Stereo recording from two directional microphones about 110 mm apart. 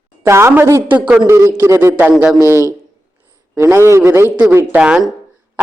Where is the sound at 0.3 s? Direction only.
25° right (ahead or behind).